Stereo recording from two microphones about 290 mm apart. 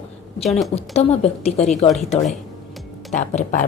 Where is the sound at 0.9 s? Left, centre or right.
Left.